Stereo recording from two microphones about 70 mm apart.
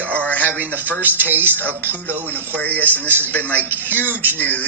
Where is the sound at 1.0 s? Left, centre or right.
Right.